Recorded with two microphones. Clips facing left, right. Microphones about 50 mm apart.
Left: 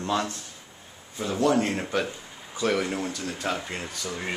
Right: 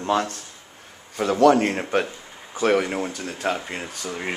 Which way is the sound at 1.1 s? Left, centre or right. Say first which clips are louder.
Right 8 dB; right.